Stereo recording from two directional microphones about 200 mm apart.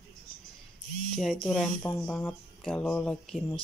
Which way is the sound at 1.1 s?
Centre (ahead or behind).